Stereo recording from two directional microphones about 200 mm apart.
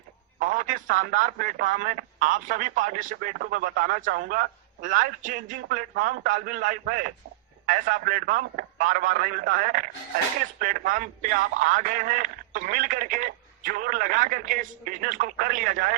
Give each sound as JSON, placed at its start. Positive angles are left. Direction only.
{"t": 0.3, "sound": "speech", "side_deg": -40}